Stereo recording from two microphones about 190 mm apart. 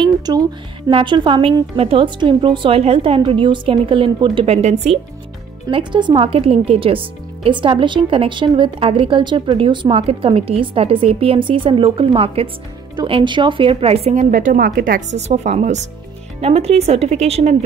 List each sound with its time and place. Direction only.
0.0 s speech: 25° right (ahead or behind)